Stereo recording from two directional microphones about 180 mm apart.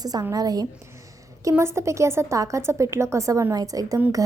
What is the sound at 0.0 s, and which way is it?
A woman's voice, 20° right (ahead or behind).